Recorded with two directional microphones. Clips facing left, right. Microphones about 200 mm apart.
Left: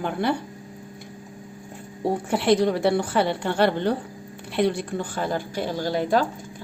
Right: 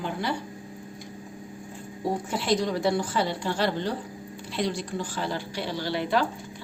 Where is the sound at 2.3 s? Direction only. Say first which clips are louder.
Left 7 dB; 60° left (ahead or behind).